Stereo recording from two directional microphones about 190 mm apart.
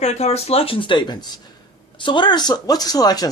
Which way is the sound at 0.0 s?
35° left (ahead or behind).